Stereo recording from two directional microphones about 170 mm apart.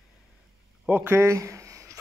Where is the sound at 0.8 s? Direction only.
15° right (ahead or behind).